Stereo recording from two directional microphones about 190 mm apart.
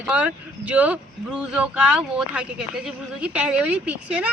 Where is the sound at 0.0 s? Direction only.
5° right (ahead or behind).